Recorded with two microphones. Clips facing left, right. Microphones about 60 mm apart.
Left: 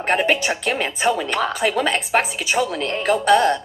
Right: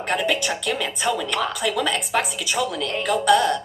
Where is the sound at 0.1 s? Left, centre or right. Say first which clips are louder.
Left 4 dB; left.